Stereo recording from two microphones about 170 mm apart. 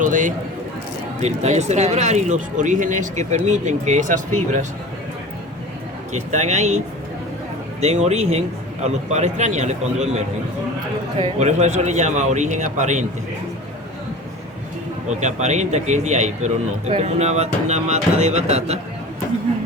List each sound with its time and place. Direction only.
0.0 s speech: 50° right (ahead or behind)
6.1 s speech: 45° right (ahead or behind)
7.8 s a man's voice: 40° right (ahead or behind)
11.2 s speech: 40° right (ahead or behind)
15.2 s a man's voice: 45° right (ahead or behind)